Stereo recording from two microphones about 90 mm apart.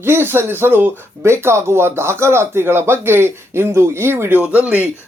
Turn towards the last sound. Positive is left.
turn(degrees=-15)  # may be behind; listen again after turning